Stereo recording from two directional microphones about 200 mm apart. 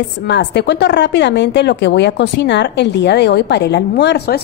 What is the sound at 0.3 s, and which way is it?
A woman's voice, 60° left (ahead or behind).